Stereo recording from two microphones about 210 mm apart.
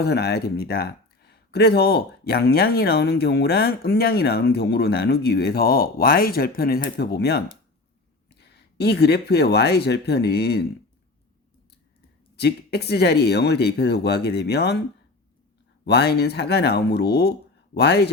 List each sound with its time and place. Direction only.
0.0 s speech: 50° left (ahead or behind)
12.4 s speech: 50° left (ahead or behind)
15.9 s speech: 50° left (ahead or behind)